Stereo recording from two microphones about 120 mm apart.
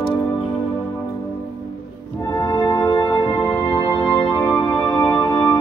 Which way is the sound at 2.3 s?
30° left (ahead or behind).